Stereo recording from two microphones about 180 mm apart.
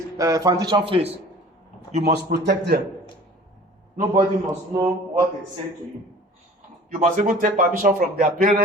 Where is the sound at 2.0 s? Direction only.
65° right (ahead or behind).